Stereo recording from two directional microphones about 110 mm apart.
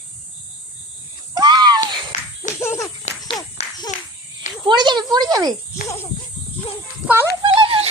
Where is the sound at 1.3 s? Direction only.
40° right (ahead or behind).